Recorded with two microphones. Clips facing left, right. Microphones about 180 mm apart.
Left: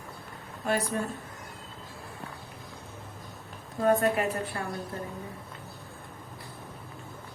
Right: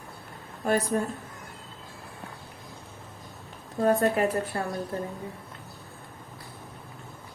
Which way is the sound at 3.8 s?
40° right (ahead or behind).